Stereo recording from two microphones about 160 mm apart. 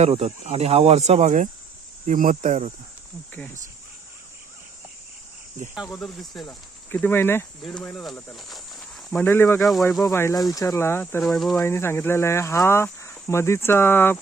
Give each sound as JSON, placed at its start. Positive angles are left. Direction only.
{"t": 0.0, "sound": "speech", "side_deg": -40}
{"t": 5.7, "sound": "speech", "side_deg": 0}
{"t": 9.0, "sound": "speech", "side_deg": 10}
{"t": 11.2, "sound": "speech", "side_deg": 0}
{"t": 11.6, "sound": "speech", "side_deg": 15}